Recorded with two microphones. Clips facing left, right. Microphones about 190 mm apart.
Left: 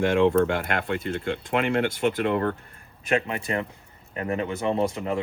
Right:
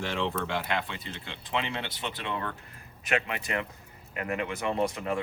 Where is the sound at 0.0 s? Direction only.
55° left (ahead or behind).